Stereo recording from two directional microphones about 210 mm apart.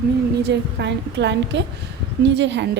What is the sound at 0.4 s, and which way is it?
A woman's voice, 55° right (ahead or behind).